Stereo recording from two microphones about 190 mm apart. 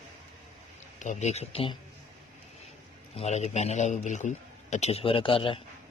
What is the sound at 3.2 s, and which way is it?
Speech, 35° left (ahead or behind).